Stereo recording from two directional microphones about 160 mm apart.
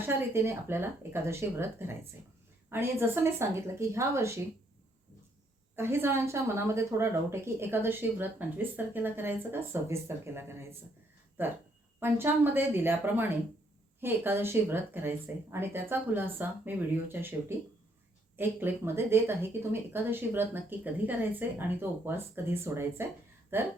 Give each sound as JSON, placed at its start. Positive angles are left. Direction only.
{"t": 0.0, "sound": "a woman's voice", "side_deg": -15}
{"t": 5.7, "sound": "a woman's voice", "side_deg": -15}
{"t": 18.3, "sound": "a woman's voice", "side_deg": -15}